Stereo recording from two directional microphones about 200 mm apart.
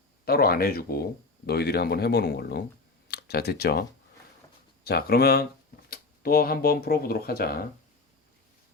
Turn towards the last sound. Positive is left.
turn(degrees=50)  # may be behind; listen again after turning